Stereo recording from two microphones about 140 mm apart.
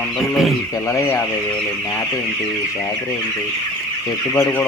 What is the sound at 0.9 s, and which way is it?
Speech, 20° left (ahead or behind).